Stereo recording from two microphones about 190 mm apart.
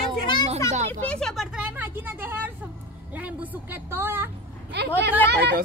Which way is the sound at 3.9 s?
10° right (ahead or behind).